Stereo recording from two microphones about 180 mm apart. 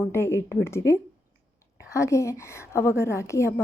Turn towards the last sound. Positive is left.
turn(degrees=15)  # may be behind; listen again after turning